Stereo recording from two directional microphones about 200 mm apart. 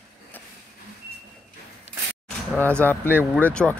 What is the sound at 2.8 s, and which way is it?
Speech, 10° left (ahead or behind).